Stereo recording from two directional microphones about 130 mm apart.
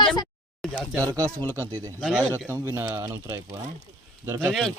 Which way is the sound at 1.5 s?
25° right (ahead or behind).